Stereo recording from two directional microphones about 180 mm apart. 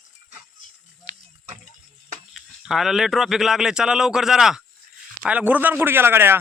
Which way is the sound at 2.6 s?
Centre (ahead or behind).